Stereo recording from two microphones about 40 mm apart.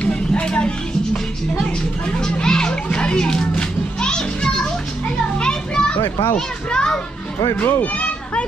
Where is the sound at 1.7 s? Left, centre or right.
Left.